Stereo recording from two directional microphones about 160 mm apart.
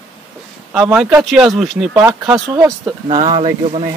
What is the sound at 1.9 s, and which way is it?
Speech, 20° right (ahead or behind).